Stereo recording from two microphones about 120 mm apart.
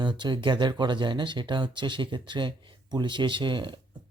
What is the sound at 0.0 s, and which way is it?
Speech, 40° right (ahead or behind).